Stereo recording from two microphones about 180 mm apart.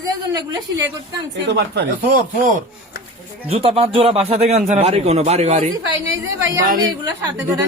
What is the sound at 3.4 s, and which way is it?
A man's voice, 35° right (ahead or behind).